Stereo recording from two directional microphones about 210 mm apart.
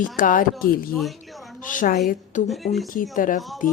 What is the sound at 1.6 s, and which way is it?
Speech, 40° left (ahead or behind).